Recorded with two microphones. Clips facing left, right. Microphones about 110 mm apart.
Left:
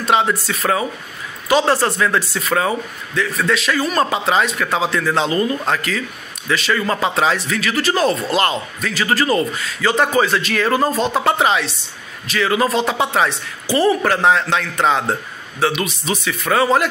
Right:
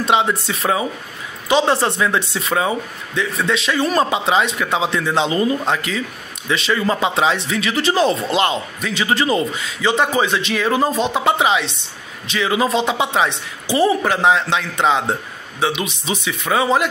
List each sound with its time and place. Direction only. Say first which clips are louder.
0.0 s a man's voice: even; 20° right (ahead or behind)
4.0 s a man's voice: even; 20° right (ahead or behind)